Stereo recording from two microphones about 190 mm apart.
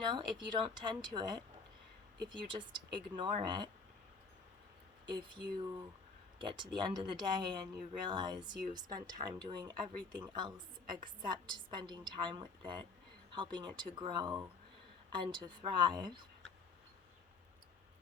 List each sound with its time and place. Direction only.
0.1 s speech: 25° right (ahead or behind)
5.1 s speech: 25° right (ahead or behind)